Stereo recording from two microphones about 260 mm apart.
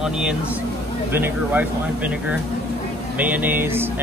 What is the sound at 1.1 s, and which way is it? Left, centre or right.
Speech, centre.